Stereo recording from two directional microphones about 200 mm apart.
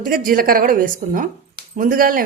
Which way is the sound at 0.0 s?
45° right (ahead or behind).